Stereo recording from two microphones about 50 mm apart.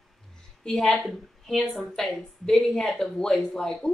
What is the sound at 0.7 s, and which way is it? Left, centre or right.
A woman's voice, centre.